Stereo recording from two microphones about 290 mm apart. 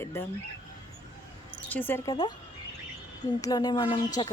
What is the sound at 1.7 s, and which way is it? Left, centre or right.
A woman's voice, centre.